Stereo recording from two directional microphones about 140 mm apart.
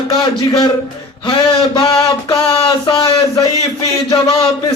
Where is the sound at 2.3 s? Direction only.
40° left (ahead or behind).